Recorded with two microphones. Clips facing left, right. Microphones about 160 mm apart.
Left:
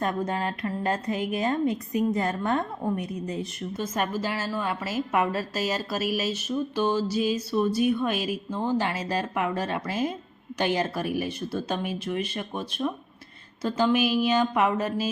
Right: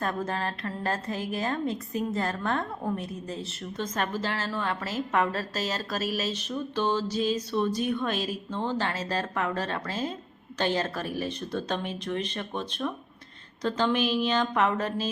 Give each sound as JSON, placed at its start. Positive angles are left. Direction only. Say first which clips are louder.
{"t": 0.0, "sound": "a woman's voice", "louder": "left 3 dB", "side_deg": 15}